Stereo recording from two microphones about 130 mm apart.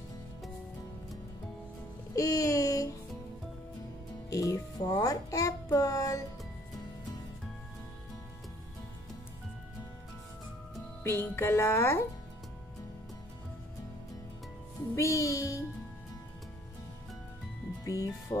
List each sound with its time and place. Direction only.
2.1 s a sound: 25° left (ahead or behind)
4.3 s a child's voice: 25° left (ahead or behind)
11.1 s speech: 15° left (ahead or behind)
15.0 s music: 25° left (ahead or behind)
17.8 s speech: 25° left (ahead or behind)